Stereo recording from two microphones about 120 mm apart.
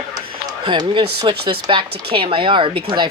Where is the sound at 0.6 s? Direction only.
40° right (ahead or behind).